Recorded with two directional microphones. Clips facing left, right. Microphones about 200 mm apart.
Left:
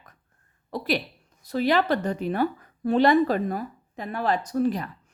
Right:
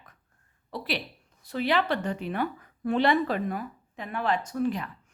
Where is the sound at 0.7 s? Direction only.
45° left (ahead or behind).